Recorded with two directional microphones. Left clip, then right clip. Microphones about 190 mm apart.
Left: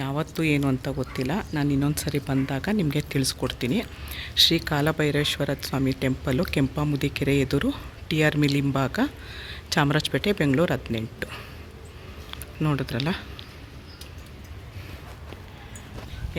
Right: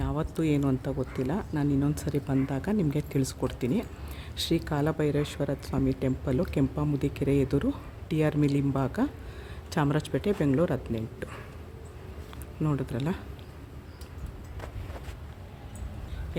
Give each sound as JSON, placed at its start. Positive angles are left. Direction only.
{"t": 0.0, "sound": "speech", "side_deg": 0}
{"t": 12.3, "sound": "speech", "side_deg": 0}